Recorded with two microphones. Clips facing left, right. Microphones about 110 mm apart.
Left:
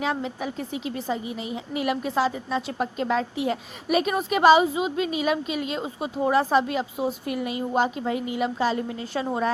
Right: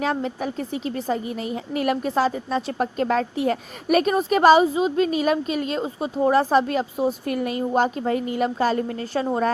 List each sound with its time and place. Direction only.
0.0 s a woman's voice: 45° right (ahead or behind)